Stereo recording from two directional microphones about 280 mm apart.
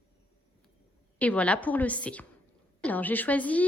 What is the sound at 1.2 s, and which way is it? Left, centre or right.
A woman's voice, centre.